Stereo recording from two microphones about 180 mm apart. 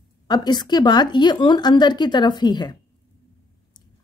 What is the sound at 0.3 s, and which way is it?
Speech, 25° left (ahead or behind).